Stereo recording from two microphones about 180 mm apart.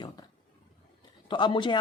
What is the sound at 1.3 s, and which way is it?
Speech, 25° left (ahead or behind).